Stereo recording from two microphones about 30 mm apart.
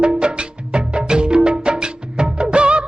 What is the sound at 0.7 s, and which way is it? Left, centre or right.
Music, right.